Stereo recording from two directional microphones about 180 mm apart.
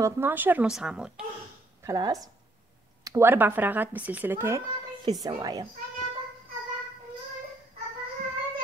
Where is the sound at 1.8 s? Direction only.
20° right (ahead or behind).